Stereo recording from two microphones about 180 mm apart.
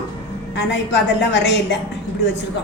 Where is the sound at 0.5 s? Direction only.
75° left (ahead or behind).